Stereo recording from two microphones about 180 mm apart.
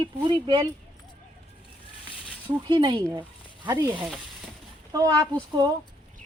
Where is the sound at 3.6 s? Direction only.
15° right (ahead or behind).